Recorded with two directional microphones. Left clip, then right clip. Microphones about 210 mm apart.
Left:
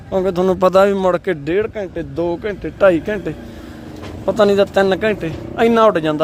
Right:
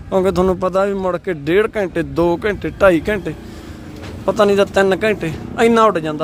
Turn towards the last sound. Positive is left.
turn(degrees=5)  # may be behind; listen again after turning